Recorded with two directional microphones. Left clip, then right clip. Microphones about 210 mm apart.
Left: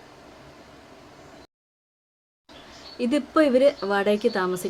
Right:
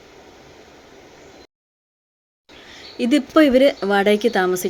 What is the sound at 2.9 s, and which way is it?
Speech, 15° right (ahead or behind).